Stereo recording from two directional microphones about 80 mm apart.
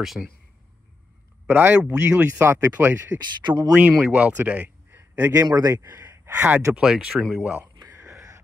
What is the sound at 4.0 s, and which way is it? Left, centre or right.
Speech, centre.